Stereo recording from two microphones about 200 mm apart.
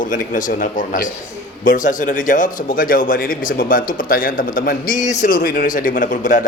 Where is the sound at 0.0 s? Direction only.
40° left (ahead or behind).